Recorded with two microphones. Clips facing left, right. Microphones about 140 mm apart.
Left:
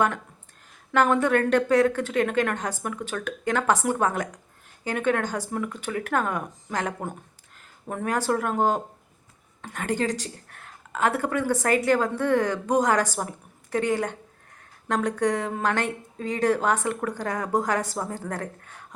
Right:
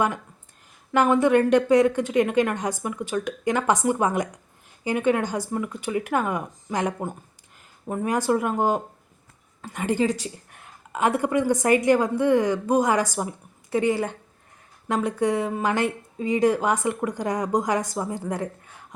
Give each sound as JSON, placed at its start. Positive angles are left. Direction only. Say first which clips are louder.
{"t": 0.9, "sound": "a woman's voice", "louder": "right 3 dB", "side_deg": -10}